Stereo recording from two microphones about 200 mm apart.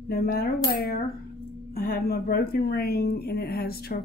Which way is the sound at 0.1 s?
50° left (ahead or behind).